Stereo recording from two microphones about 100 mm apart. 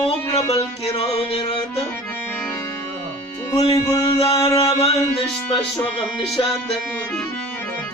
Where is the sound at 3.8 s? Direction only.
35° left (ahead or behind).